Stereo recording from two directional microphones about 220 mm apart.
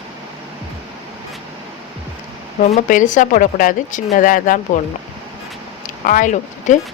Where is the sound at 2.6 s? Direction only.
35° left (ahead or behind).